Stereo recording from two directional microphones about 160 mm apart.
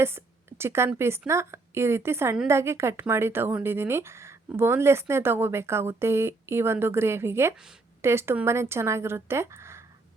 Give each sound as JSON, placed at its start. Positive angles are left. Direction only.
{"t": 0.0, "sound": "speech", "side_deg": -15}